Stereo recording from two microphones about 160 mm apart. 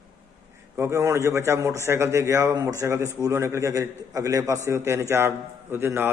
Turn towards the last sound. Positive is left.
turn(degrees=-15)  # may be behind; listen again after turning